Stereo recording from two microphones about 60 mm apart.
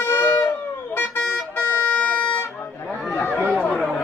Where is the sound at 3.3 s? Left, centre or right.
Right.